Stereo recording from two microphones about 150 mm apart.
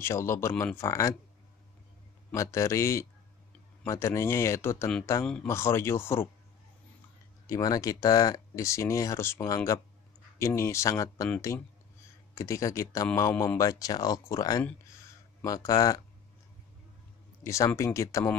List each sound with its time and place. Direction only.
0.0 s speech: 20° left (ahead or behind)
2.3 s speech: 20° left (ahead or behind)
5.2 s speech: 5° left (ahead or behind)
5.5 s speech: 15° left (ahead or behind)
7.4 s speech: 25° left (ahead or behind)
17.4 s speech: 20° left (ahead or behind)